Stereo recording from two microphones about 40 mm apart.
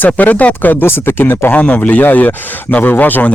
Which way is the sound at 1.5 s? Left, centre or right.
Left.